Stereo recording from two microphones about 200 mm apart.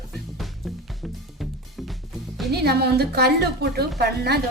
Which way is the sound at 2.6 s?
50° right (ahead or behind).